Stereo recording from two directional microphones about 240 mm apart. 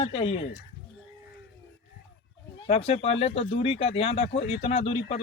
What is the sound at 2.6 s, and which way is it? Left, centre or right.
Speech, left.